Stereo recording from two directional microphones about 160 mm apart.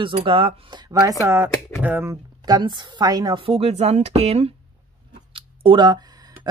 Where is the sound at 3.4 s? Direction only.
40° right (ahead or behind).